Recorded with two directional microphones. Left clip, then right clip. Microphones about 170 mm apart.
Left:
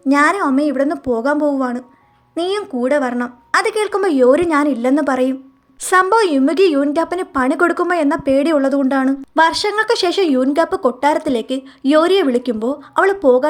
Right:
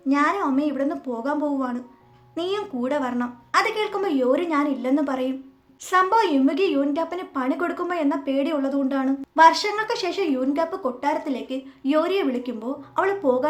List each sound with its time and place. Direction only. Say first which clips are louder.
0.1 s a woman's voice: left 7 dB; 45° left (ahead or behind)